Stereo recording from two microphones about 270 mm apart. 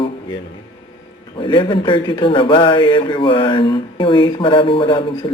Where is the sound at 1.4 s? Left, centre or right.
Centre.